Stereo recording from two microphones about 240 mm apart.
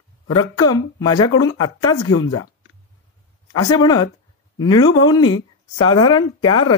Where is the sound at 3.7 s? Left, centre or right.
Centre.